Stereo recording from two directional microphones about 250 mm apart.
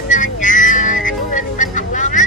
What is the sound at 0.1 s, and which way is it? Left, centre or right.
Music, left.